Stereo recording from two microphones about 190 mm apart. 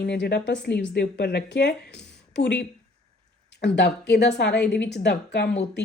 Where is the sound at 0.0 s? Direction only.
60° left (ahead or behind).